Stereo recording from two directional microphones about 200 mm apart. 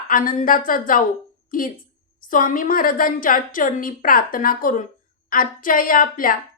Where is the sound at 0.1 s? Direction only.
45° left (ahead or behind).